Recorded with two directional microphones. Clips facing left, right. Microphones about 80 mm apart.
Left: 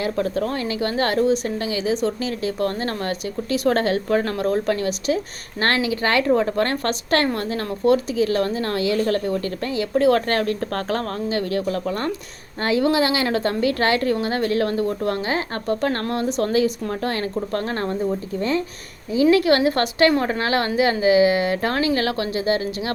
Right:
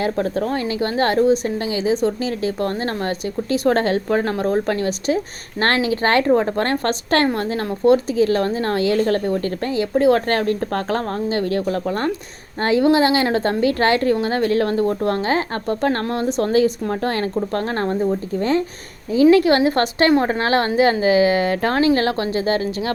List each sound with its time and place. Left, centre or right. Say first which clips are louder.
0.0 s a woman's voice: right 2 dB; right